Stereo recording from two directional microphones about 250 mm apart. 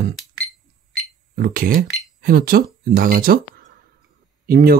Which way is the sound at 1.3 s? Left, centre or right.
Right.